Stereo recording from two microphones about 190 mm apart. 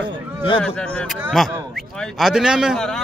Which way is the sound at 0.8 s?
5° left (ahead or behind).